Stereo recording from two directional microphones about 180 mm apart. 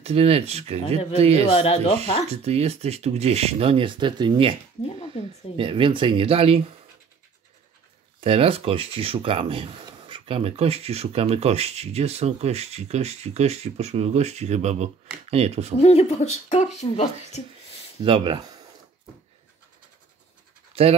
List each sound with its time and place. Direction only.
0.0 s speech: 35° right (ahead or behind)
1.5 s speech: 35° left (ahead or behind)
2.4 s speech: 35° right (ahead or behind)
4.8 s speech: 35° left (ahead or behind)
5.6 s speech: 30° right (ahead or behind)
8.2 s speech: 35° right (ahead or behind)
15.8 s speech: 35° left (ahead or behind)
18.0 s speech: 25° right (ahead or behind)